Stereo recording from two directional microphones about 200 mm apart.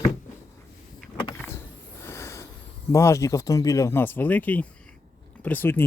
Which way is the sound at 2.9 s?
15° left (ahead or behind).